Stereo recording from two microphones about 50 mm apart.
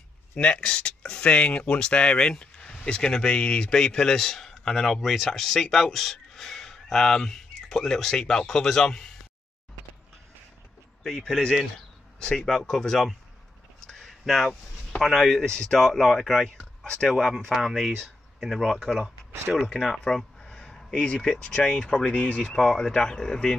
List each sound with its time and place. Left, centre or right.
0.4 s speech: centre
11.1 s speech: centre
13.8 s a sound: centre
15.1 s speech: centre
16.8 s speech: centre
17.1 s speech: centre
22.1 s speech: left
22.6 s speech: centre